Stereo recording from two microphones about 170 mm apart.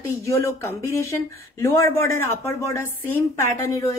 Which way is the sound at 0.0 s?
15° left (ahead or behind).